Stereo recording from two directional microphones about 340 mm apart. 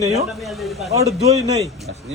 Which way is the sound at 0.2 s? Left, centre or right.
Centre.